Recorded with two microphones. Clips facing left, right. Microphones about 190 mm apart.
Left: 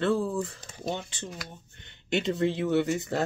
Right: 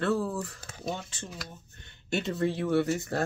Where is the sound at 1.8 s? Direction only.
20° left (ahead or behind).